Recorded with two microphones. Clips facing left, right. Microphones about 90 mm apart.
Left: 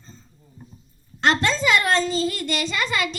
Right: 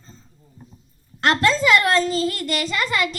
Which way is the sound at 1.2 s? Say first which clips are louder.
Right 2 dB; 50° right (ahead or behind).